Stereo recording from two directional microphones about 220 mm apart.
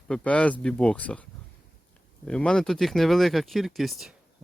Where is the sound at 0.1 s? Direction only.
5° left (ahead or behind).